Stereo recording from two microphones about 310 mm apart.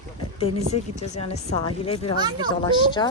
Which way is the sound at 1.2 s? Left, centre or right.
Centre.